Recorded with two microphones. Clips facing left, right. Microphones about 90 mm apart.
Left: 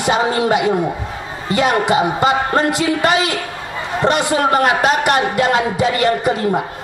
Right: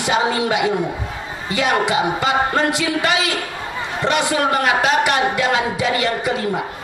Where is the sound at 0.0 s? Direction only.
40° left (ahead or behind).